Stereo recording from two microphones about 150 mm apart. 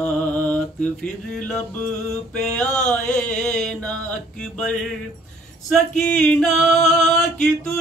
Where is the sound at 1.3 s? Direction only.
5° left (ahead or behind).